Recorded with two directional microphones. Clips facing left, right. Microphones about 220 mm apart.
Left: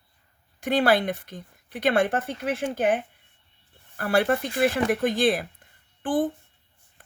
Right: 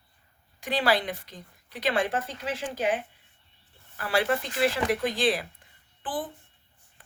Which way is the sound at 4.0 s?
50° left (ahead or behind).